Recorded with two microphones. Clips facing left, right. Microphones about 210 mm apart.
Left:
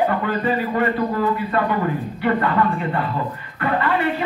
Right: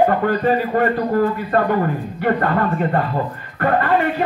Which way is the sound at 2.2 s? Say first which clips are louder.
Right 1 dB; 50° right (ahead or behind).